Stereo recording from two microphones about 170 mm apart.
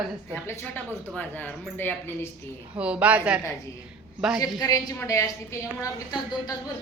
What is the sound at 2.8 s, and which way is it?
Speech, 5° right (ahead or behind).